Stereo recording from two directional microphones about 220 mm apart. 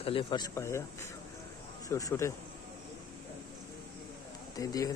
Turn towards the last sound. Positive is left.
turn(degrees=15)  # may be behind; listen again after turning